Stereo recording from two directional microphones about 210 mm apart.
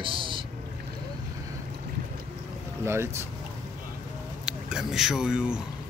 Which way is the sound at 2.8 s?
10° right (ahead or behind).